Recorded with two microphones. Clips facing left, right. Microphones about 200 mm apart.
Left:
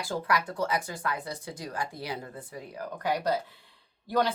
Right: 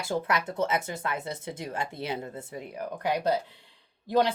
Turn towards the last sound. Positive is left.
turn(degrees=-20)  # may be behind; listen again after turning